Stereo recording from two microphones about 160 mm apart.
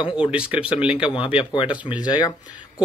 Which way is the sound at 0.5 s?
5° right (ahead or behind).